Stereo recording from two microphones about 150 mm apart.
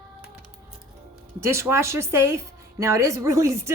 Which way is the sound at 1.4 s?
20° right (ahead or behind).